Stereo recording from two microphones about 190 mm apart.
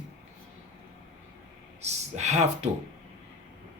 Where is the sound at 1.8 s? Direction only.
35° right (ahead or behind).